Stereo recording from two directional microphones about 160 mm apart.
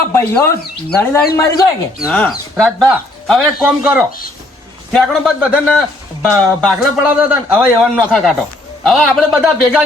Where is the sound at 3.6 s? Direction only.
10° right (ahead or behind).